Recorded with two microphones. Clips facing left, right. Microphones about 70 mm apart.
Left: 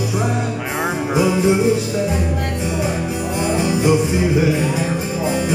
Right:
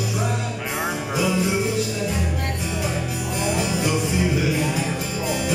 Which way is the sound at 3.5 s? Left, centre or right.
Left.